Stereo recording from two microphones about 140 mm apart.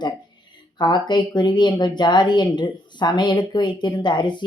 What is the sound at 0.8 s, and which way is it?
Speech, 30° left (ahead or behind).